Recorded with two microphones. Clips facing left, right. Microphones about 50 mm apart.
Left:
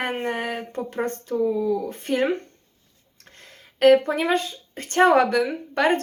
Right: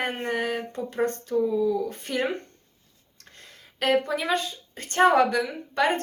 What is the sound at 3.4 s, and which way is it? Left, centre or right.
Speech, left.